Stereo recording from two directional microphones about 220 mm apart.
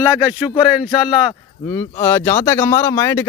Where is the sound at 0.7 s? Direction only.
5° right (ahead or behind).